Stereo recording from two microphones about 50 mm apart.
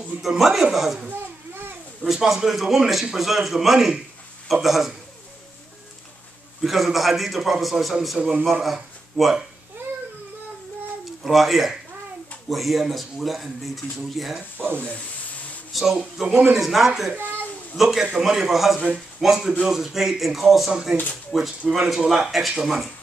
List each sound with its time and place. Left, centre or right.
0.2 s a man's voice: centre
2.0 s a man's voice: centre
6.6 s a man's voice: centre
11.2 s a man's voice: centre
14.6 s speech: right
15.7 s speech: centre
16.3 s speech: right
16.5 s a man's voice: centre